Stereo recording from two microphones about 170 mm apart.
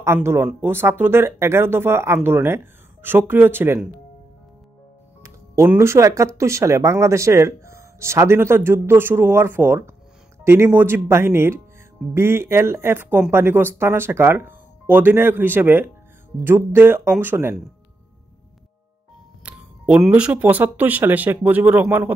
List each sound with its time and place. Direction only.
0.0 s speech: 15° right (ahead or behind)
5.2 s speech: 15° right (ahead or behind)
19.4 s speech: 5° right (ahead or behind)